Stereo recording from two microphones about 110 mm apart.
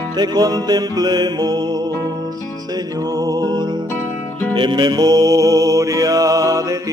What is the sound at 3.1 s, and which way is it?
Music, 35° right (ahead or behind).